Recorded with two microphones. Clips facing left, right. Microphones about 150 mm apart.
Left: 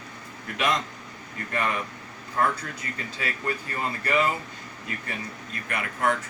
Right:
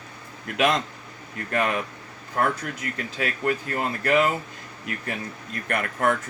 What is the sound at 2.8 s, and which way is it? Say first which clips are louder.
Speech: right 5 dB; 70° right (ahead or behind).